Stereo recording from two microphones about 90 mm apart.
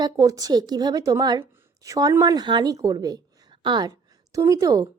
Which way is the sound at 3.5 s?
60° right (ahead or behind).